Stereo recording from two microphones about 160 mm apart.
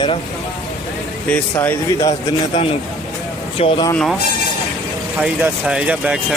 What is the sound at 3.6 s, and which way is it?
Speech, 40° left (ahead or behind).